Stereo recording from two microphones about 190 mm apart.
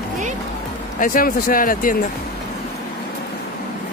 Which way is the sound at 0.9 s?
45° left (ahead or behind).